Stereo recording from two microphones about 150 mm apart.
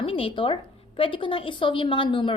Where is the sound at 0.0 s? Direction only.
35° left (ahead or behind).